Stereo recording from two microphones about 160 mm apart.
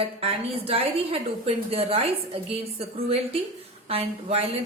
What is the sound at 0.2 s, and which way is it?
A woman's voice, 35° right (ahead or behind).